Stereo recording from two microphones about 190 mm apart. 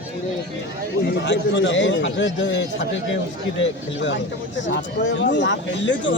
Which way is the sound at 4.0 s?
70° left (ahead or behind).